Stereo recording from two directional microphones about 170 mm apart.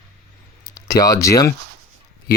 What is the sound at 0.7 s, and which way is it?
Speech, 20° left (ahead or behind).